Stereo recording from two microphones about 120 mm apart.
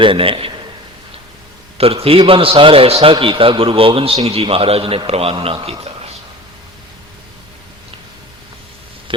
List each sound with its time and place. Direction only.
0.0 s a man's voice: 50° right (ahead or behind)
1.8 s a man's voice: 55° right (ahead or behind)